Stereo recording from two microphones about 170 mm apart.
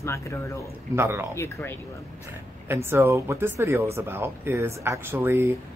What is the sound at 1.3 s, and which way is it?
Speech, 15° left (ahead or behind).